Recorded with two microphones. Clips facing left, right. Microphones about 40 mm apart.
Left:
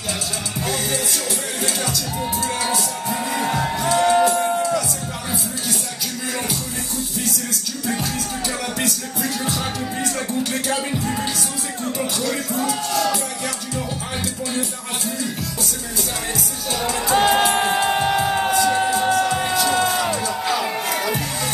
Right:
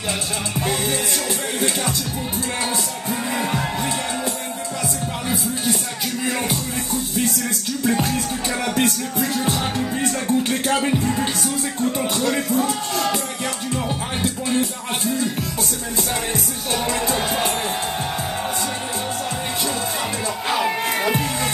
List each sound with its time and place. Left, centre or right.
3.3 s music: centre
4.0 s music: left
8.7 s music: right
12.2 s music: right
14.2 s music: right
17.1 s music: left
20.0 s music: right